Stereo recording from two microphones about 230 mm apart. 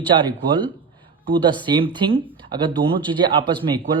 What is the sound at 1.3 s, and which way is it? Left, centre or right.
Speech, centre.